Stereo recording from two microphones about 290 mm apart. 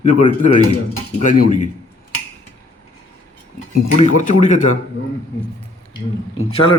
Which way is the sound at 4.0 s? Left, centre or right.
Left.